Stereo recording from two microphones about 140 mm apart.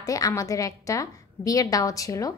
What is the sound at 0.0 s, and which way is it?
A woman's voice, 25° left (ahead or behind).